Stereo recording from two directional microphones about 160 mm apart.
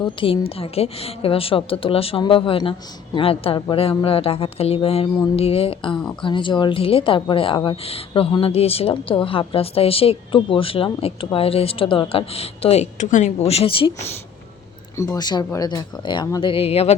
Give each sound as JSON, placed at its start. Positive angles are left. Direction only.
{"t": 0.0, "sound": "a woman's voice", "side_deg": 35}
{"t": 14.9, "sound": "speech", "side_deg": 20}